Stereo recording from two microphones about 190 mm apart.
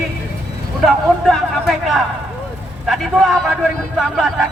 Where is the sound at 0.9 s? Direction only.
Centre (ahead or behind).